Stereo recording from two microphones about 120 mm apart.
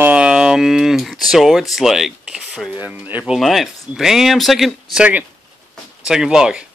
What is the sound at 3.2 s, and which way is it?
Speech, centre (ahead or behind).